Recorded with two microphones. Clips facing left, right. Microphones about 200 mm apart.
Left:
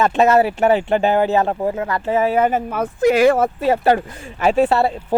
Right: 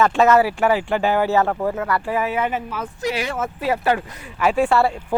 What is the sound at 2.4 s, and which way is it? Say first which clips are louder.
Speech: left 6 dB; 45° left (ahead or behind).